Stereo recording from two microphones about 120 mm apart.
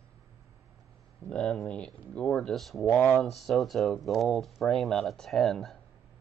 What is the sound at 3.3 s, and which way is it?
Speech, centre (ahead or behind).